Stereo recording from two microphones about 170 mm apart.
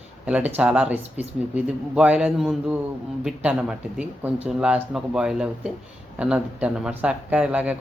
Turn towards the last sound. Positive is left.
turn(degrees=-10)  # may be behind; listen again after turning